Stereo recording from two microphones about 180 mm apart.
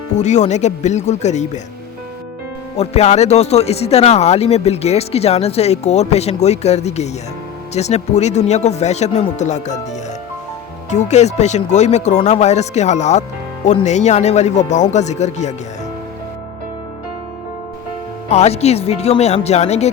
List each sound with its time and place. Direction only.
0.2 s speech: 40° left (ahead or behind)
2.7 s speech: 35° left (ahead or behind)
10.8 s speech: 40° left (ahead or behind)
18.3 s speech: 35° left (ahead or behind)